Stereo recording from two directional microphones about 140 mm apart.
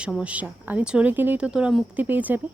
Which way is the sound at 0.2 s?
10° right (ahead or behind).